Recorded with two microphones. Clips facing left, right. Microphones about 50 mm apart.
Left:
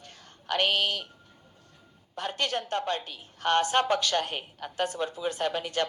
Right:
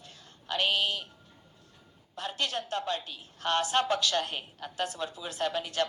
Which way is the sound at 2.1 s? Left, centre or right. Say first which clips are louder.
Left 3 dB; left.